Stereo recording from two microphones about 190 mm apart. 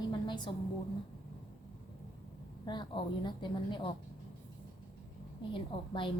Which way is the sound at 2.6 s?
25° left (ahead or behind).